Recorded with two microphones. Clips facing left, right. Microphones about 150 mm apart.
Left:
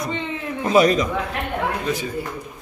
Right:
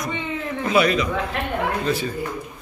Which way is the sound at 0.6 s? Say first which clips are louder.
Left 3 dB; 40° left (ahead or behind).